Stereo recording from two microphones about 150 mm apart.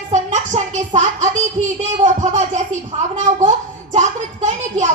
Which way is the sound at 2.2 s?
55° right (ahead or behind).